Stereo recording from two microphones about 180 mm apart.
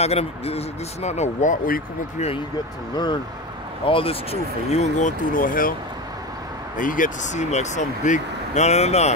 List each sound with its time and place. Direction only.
0.0 s speech: 35° left (ahead or behind)
3.8 s speech: 30° left (ahead or behind); by 5.8 s 50° left (ahead or behind)
6.8 s speech: 50° left (ahead or behind)